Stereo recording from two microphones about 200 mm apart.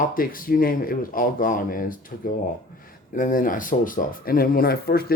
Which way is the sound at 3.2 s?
40° left (ahead or behind).